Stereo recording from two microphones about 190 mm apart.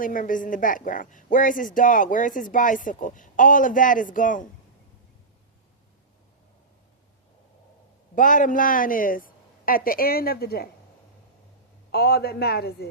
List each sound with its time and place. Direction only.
0.0 s speech: 45° left (ahead or behind)
8.1 s speech: 45° left (ahead or behind)
11.9 s a man's voice: 55° left (ahead or behind)